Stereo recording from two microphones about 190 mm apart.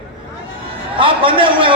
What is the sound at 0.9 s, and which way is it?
Speech, 25° right (ahead or behind).